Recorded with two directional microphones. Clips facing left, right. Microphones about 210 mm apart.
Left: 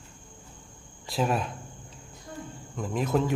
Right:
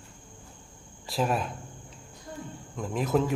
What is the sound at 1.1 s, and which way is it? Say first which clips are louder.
Speech: left 1 dB; centre (ahead or behind).